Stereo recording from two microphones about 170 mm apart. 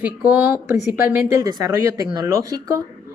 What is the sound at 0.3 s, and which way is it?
Speech, 10° right (ahead or behind).